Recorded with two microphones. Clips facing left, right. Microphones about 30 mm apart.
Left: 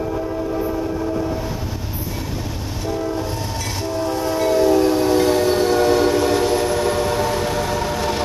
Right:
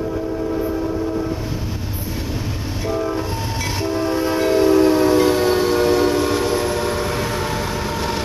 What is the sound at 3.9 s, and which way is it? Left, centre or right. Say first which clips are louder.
Train: right 1 dB; right.